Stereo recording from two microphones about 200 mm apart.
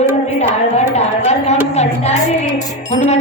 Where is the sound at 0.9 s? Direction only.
35° left (ahead or behind).